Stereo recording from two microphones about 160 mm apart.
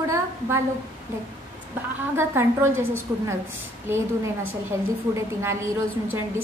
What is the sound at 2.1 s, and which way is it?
Speech, 15° right (ahead or behind).